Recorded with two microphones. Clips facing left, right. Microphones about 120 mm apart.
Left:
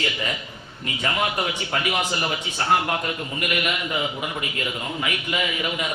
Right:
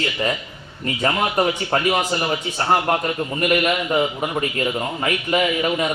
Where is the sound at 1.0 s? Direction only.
40° right (ahead or behind).